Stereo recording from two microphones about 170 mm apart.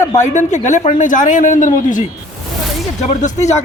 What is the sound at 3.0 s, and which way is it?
Speech, 45° left (ahead or behind).